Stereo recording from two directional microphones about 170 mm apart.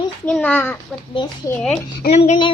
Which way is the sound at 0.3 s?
10° left (ahead or behind).